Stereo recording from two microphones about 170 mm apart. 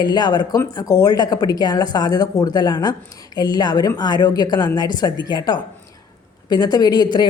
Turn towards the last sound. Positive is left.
turn(degrees=25)  # may be behind; listen again after turning